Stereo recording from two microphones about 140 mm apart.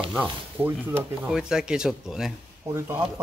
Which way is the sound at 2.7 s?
20° right (ahead or behind).